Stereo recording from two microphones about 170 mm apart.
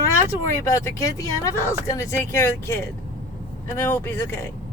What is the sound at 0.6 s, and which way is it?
Speech, 20° left (ahead or behind).